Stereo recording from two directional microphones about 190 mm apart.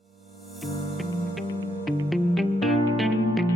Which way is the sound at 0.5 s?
Centre (ahead or behind).